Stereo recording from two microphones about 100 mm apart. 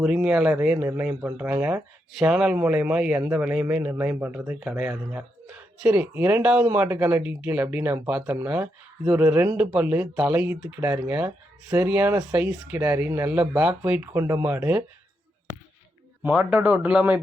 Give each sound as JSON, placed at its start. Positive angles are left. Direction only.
{"t": 0.0, "sound": "speech", "side_deg": -10}
{"t": 16.3, "sound": "speech", "side_deg": -10}